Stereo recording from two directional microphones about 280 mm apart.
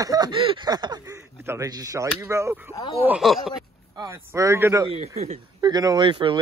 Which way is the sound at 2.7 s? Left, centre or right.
Centre.